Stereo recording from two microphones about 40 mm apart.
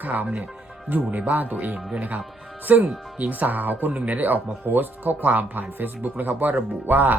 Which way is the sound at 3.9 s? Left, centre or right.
Right.